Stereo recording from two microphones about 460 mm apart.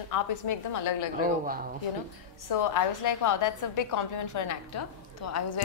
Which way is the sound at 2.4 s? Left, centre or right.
Left.